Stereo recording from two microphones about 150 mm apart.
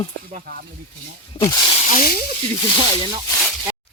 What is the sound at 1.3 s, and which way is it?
Speech, 40° left (ahead or behind).